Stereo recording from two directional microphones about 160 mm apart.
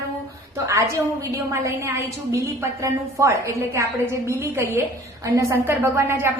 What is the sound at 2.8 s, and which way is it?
A woman's voice, 20° right (ahead or behind).